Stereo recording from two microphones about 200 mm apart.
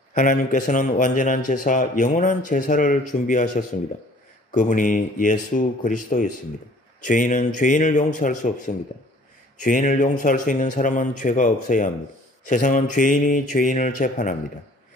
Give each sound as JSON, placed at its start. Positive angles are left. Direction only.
{"t": 0.1, "sound": "speech", "side_deg": 40}